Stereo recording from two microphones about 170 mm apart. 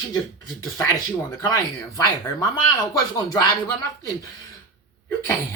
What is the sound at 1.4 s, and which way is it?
Speech, 20° left (ahead or behind).